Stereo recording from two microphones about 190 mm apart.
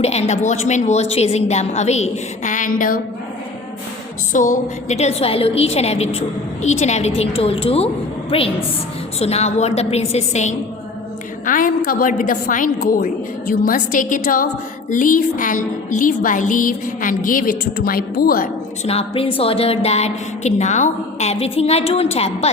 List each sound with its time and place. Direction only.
0.0 s a woman's voice: 35° left (ahead or behind)
4.3 s a woman's voice: 45° left (ahead or behind)
18.9 s a woman's voice: 30° left (ahead or behind)